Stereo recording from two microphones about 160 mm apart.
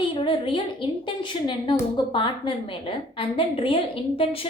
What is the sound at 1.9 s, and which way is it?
A woman's voice, 30° left (ahead or behind).